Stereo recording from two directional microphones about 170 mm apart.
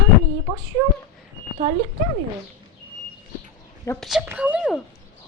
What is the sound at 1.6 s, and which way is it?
Speech, 35° right (ahead or behind).